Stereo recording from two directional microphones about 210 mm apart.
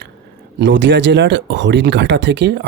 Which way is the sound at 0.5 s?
55° right (ahead or behind).